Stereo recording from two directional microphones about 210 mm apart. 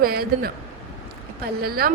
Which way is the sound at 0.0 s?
45° right (ahead or behind).